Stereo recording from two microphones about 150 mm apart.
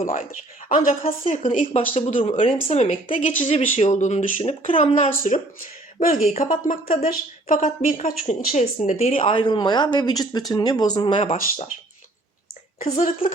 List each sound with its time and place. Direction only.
0.0 s a woman's voice: 60° left (ahead or behind)
1.0 s a woman's voice: 40° left (ahead or behind); by 3.5 s 60° left (ahead or behind)
3.5 s a woman's voice: 45° left (ahead or behind); by 11.2 s 30° left (ahead or behind)
12.8 s speech: 40° left (ahead or behind)